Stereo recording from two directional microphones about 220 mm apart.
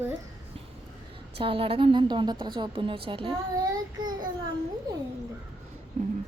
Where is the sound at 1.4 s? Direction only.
25° right (ahead or behind).